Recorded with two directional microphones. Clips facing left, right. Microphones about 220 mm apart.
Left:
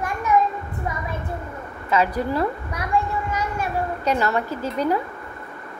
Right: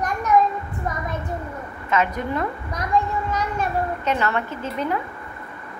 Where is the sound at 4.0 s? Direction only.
40° left (ahead or behind).